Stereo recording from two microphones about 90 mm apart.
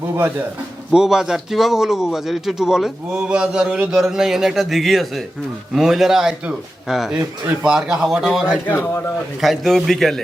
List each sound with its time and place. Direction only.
0.2 s speech: 20° right (ahead or behind)
0.9 s a man's voice: 5° right (ahead or behind)
8.6 s a man's voice: 25° left (ahead or behind)
9.4 s a man's voice: centre (ahead or behind)